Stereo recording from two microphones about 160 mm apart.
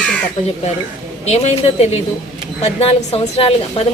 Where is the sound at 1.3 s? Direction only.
40° left (ahead or behind).